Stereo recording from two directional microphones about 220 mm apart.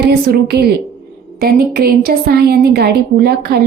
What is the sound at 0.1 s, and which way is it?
A woman's voice, 45° right (ahead or behind).